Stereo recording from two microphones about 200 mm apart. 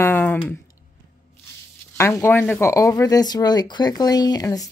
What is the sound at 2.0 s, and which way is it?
Speech, 15° left (ahead or behind).